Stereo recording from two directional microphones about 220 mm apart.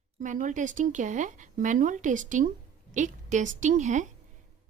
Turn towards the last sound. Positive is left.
turn(degrees=-35)  # may be behind; listen again after turning